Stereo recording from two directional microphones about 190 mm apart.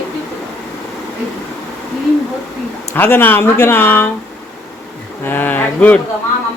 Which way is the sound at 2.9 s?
10° left (ahead or behind).